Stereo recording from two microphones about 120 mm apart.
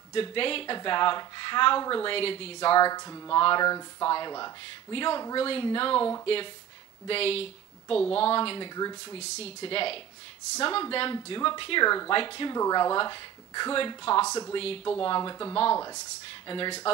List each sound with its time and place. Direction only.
0.1 s speech: 45° left (ahead or behind)
2.1 s speech: 50° left (ahead or behind)
8.7 s speech: 35° left (ahead or behind)
9.2 s speech: 55° left (ahead or behind)
12.5 s speech: 30° left (ahead or behind)
12.9 s speech: 40° left (ahead or behind)
14.2 s speech: 25° left (ahead or behind)
15.0 s speech: 40° left (ahead or behind)